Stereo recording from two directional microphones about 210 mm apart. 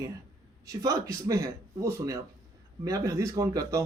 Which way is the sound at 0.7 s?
15° right (ahead or behind).